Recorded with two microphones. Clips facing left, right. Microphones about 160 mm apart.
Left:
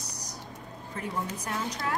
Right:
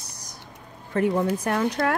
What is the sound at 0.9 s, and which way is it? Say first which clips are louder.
Speech: right 12 dB; 60° right (ahead or behind).